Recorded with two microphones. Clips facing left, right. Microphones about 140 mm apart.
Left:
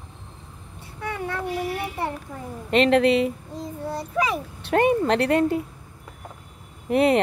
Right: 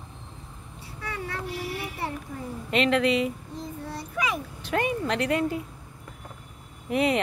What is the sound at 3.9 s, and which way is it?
Child singing, 35° left (ahead or behind).